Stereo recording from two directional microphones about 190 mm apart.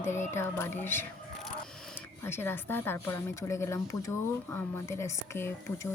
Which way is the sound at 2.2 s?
10° left (ahead or behind).